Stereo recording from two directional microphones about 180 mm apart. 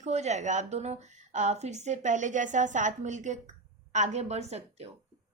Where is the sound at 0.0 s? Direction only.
40° right (ahead or behind).